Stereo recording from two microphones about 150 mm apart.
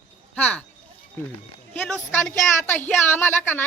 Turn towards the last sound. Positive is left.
turn(degrees=15)  # may be behind; listen again after turning